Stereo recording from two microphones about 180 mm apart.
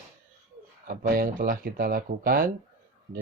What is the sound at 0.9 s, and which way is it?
A man's voice, 55° right (ahead or behind).